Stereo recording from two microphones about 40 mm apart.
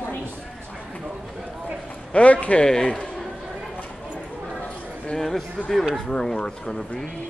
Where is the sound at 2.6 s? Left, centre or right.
Centre.